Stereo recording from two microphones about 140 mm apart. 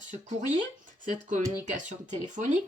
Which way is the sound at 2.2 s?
65° right (ahead or behind).